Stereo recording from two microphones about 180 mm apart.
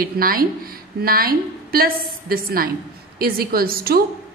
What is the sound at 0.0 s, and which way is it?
A woman's voice, 55° right (ahead or behind).